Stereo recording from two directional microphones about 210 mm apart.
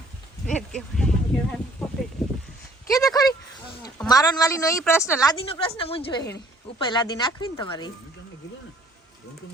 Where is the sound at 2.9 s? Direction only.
15° left (ahead or behind).